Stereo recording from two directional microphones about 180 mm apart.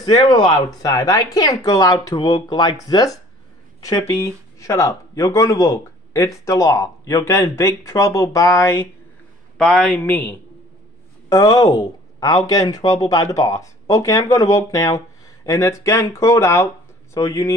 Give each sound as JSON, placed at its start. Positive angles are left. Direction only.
{"t": 0.0, "sound": "speech", "side_deg": 25}
{"t": 9.6, "sound": "speech", "side_deg": 5}
{"t": 11.2, "sound": "speech", "side_deg": 20}